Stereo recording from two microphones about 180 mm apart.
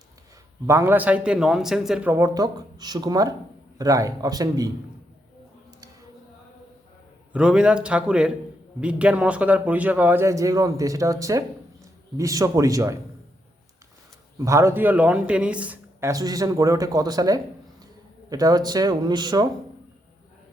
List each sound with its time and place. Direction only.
0.7 s speech: 15° right (ahead or behind)
7.3 s a man's voice: 5° right (ahead or behind)
14.3 s speech: 15° right (ahead or behind)